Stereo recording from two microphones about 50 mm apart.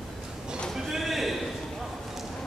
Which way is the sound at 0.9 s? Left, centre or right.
Centre.